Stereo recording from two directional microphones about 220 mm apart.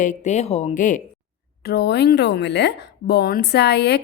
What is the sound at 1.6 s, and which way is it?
A woman's voice, 50° left (ahead or behind).